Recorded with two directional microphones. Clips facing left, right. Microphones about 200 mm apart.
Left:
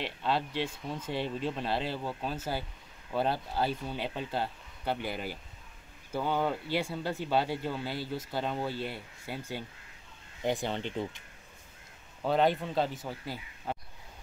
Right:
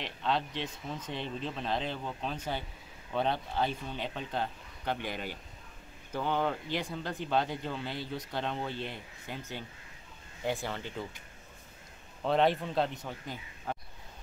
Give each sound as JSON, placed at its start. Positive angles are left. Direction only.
{"t": 0.0, "sound": "speech", "side_deg": 10}
{"t": 10.4, "sound": "speech", "side_deg": 20}
{"t": 12.2, "sound": "speech", "side_deg": 0}